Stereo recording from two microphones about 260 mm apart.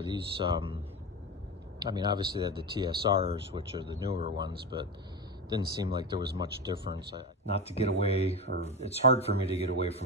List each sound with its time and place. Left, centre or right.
0.0 s speech: centre
1.8 s speech: centre
7.4 s speech: left